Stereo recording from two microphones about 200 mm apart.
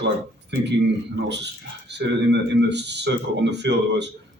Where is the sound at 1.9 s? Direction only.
60° right (ahead or behind).